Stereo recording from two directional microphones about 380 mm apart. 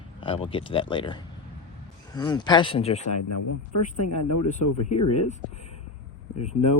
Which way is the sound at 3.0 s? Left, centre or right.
Left.